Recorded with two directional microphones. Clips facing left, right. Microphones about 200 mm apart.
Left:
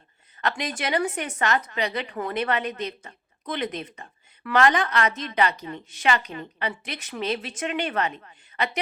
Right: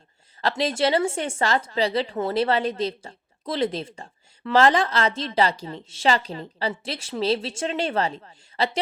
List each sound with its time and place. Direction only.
0.4 s a woman's voice: 25° right (ahead or behind)